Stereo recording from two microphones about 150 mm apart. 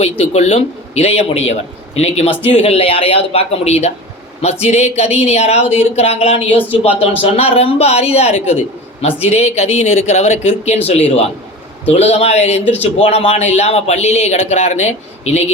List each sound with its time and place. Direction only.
0.0 s a man's voice: 45° left (ahead or behind)